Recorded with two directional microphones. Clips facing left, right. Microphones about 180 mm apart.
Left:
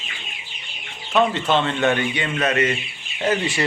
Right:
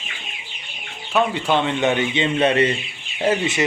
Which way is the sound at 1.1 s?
10° right (ahead or behind).